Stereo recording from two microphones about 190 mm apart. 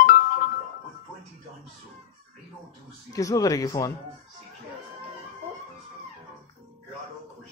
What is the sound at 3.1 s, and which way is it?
Speech, 20° left (ahead or behind).